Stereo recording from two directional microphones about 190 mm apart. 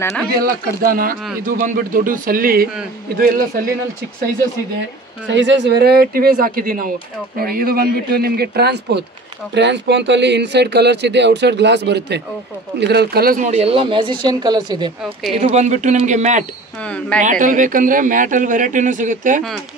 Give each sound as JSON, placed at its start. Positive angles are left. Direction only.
{"t": 0.0, "sound": "speech", "side_deg": 15}
{"t": 0.4, "sound": "speech", "side_deg": -50}
{"t": 5.3, "sound": "speech", "side_deg": -70}
{"t": 15.0, "sound": "a woman's voice", "side_deg": -5}
{"t": 15.4, "sound": "speech", "side_deg": -40}
{"t": 16.8, "sound": "speech", "side_deg": 5}
{"t": 17.2, "sound": "speech", "side_deg": -45}